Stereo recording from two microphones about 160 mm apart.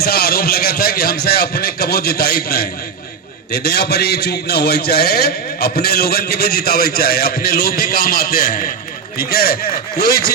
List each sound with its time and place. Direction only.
0.0 s a man's voice: 75° left (ahead or behind)